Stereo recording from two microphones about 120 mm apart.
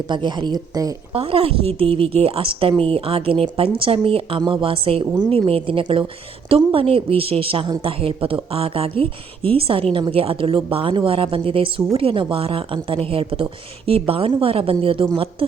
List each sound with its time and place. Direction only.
0.1 s speech: 40° right (ahead or behind)
1.1 s a woman's voice: 50° right (ahead or behind)